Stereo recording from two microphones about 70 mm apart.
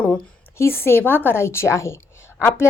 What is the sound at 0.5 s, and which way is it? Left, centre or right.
A woman's voice, left.